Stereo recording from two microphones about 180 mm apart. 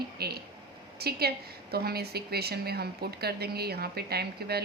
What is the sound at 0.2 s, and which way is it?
A woman's voice, 60° right (ahead or behind).